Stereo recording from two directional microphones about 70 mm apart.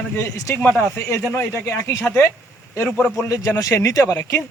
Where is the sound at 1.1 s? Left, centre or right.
Left.